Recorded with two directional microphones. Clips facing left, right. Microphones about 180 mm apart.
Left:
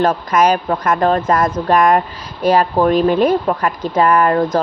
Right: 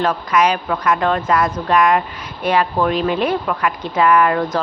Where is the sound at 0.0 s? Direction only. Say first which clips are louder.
Left 3 dB; 45° left (ahead or behind).